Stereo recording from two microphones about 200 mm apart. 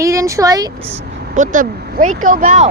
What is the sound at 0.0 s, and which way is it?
Speech, 15° right (ahead or behind).